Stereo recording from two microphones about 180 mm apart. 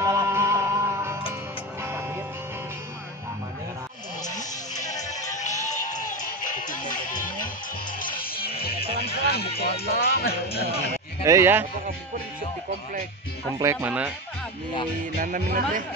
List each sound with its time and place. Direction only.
0.0 s music: 15° right (ahead or behind)
4.4 s music: 40° left (ahead or behind); by 10.7 s 60° left (ahead or behind)
11.2 s speech: 15° right (ahead or behind)
13.6 s speech: 10° right (ahead or behind)
15.1 s speech: 50° right (ahead or behind)